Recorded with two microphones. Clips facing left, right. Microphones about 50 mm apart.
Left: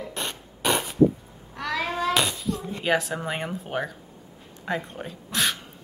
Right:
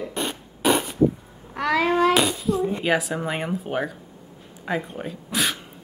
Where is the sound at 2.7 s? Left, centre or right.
Centre.